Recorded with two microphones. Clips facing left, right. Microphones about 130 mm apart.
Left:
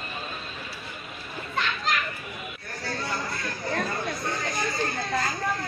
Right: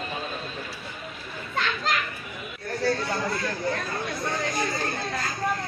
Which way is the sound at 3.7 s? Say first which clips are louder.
Left 3 dB; 25° left (ahead or behind).